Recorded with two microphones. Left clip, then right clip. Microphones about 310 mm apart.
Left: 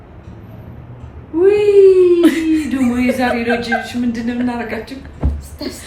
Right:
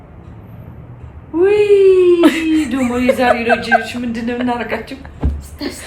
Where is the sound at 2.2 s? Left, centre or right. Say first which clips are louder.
Right 1 dB; centre.